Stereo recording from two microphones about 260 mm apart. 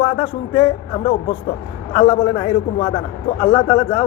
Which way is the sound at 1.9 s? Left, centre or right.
Centre.